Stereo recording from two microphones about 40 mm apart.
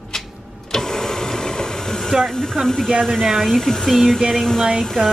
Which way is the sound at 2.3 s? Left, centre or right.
Centre.